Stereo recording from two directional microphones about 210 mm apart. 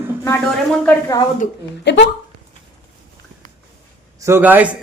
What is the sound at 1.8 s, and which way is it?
Speech, 55° left (ahead or behind).